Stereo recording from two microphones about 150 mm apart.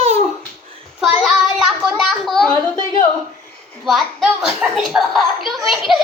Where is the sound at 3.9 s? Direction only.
Centre (ahead or behind).